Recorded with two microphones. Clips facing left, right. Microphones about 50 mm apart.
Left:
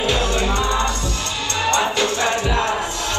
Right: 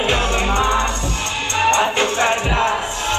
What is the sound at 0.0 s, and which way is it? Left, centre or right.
Music, right.